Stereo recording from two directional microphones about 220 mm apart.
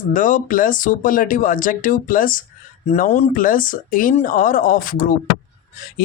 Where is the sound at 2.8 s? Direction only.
30° left (ahead or behind).